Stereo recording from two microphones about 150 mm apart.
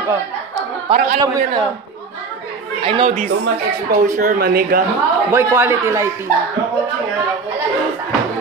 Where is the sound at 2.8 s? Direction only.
40° right (ahead or behind).